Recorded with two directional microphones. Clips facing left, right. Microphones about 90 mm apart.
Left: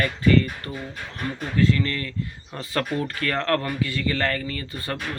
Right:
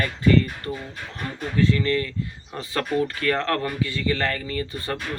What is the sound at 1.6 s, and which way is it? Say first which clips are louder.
Speech: right 1 dB; 20° right (ahead or behind).